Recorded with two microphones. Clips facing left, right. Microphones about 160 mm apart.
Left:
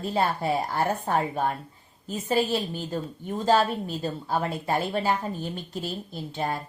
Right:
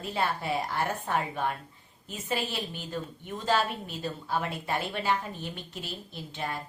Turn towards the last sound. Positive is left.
turn(degrees=40)  # may be behind; listen again after turning